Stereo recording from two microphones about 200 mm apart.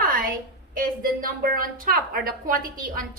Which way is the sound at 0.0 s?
45° right (ahead or behind).